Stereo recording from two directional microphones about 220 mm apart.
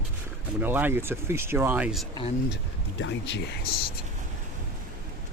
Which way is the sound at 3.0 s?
55° left (ahead or behind).